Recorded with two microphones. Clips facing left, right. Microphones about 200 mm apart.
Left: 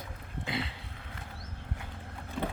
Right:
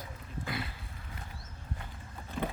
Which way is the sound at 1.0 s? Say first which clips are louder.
Left 1 dB; 75° left (ahead or behind).